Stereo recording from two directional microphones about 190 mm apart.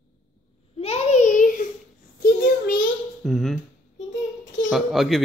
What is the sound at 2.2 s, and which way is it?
Child singing, 45° left (ahead or behind).